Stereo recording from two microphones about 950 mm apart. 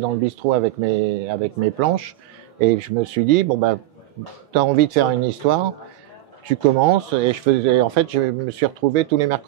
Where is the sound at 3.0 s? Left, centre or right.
Right.